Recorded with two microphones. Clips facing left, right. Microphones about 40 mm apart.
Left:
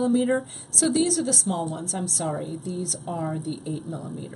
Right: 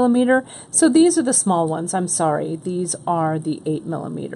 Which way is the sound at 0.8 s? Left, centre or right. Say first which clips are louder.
Right 9 dB; right.